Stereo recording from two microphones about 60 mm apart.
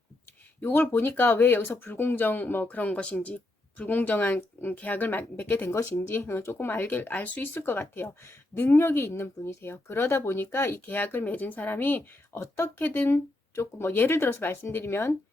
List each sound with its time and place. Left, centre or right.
0.6 s speech: left
6.0 s speech: left
6.8 s speech: left